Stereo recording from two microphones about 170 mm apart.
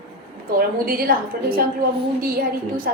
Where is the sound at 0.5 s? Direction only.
60° right (ahead or behind).